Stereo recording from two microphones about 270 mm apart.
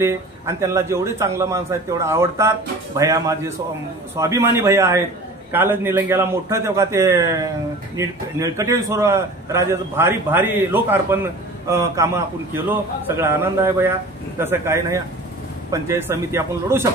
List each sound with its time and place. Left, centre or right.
0.0 s a man's voice: centre
13.2 s a man's voice: centre